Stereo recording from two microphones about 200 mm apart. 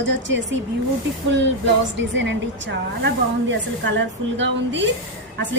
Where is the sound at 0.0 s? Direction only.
65° right (ahead or behind).